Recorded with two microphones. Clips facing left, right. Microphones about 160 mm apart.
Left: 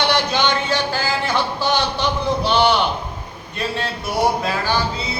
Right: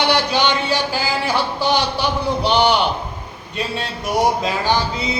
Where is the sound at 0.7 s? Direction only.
10° right (ahead or behind).